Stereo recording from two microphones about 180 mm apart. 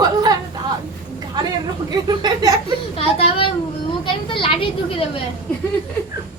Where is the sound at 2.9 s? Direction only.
35° left (ahead or behind).